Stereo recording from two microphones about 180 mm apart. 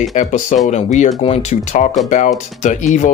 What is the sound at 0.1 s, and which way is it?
Speech, 40° left (ahead or behind).